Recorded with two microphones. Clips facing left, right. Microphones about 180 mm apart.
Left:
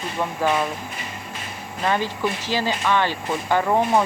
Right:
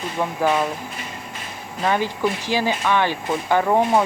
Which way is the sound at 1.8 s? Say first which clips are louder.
Right 2 dB; 10° right (ahead or behind).